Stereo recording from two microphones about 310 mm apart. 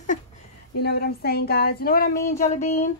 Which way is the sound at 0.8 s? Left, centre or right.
Left.